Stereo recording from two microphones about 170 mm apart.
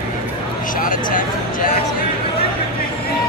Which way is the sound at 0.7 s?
55° left (ahead or behind).